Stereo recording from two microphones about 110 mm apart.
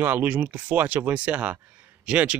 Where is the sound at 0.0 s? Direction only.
15° right (ahead or behind).